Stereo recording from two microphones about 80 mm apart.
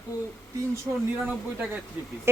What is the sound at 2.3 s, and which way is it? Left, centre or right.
Speech, right.